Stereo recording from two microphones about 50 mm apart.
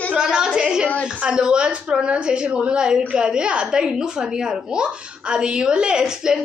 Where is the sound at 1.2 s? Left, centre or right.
Centre.